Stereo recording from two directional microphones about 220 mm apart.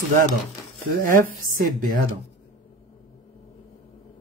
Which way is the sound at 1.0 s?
40° right (ahead or behind).